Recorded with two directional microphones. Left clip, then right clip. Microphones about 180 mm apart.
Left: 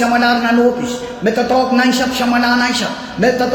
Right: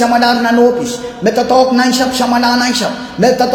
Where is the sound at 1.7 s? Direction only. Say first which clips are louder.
Right 2 dB; 45° right (ahead or behind).